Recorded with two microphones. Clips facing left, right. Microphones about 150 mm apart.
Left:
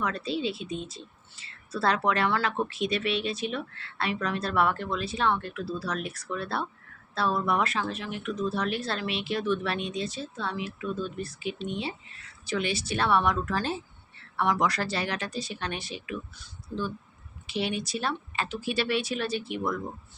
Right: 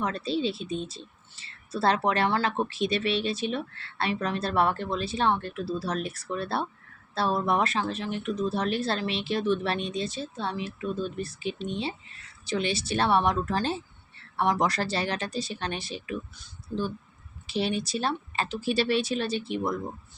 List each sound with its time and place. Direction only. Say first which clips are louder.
0.0 s a woman's voice: right 2 dB; 30° right (ahead or behind)
17.5 s speech: right 2 dB; 35° right (ahead or behind)